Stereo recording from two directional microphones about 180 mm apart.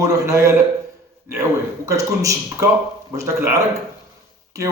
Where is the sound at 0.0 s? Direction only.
15° right (ahead or behind).